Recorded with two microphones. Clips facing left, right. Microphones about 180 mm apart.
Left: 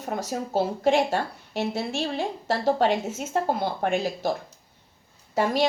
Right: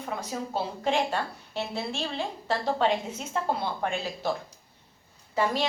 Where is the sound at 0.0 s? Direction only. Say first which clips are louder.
Left 4 dB; 45° left (ahead or behind).